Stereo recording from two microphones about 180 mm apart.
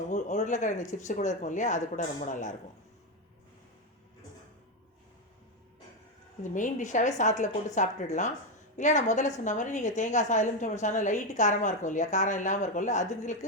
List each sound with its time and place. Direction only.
0.1 s a woman's voice: 40° left (ahead or behind)
6.4 s a woman's voice: 45° left (ahead or behind)